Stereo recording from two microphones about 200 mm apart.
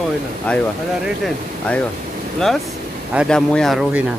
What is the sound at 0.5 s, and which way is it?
Speech, 5° left (ahead or behind).